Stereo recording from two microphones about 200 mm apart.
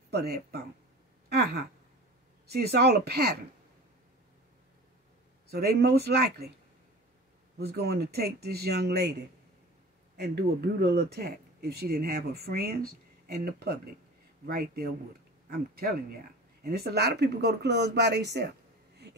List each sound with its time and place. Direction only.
0.1 s speech: 50° right (ahead or behind)
5.5 s speech: 50° right (ahead or behind)
7.5 s speech: 55° right (ahead or behind)
10.1 s speech: 50° right (ahead or behind)